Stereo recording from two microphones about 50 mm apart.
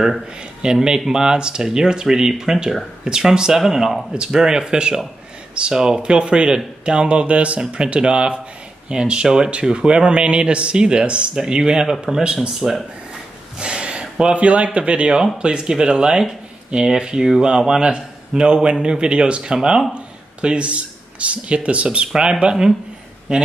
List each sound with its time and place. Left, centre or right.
0.6 s speech: centre
13.6 s speech: centre